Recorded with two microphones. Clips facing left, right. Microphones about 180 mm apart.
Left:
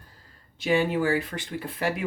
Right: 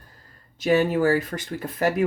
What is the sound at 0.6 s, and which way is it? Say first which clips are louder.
Speech: right 4 dB; 45° right (ahead or behind).